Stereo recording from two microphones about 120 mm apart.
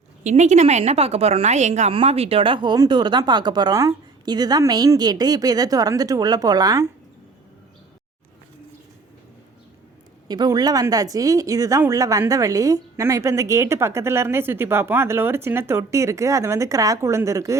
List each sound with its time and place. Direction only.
0.3 s a woman's voice: 75° right (ahead or behind)
1.9 s speech: 55° right (ahead or behind); by 6.8 s 35° right (ahead or behind)
10.2 s a woman's voice: 35° right (ahead or behind)